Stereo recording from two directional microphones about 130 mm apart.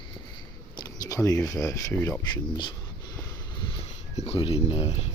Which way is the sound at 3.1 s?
35° left (ahead or behind).